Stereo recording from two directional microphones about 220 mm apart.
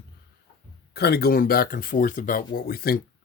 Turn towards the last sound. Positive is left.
turn(degrees=45)  # may be behind; listen again after turning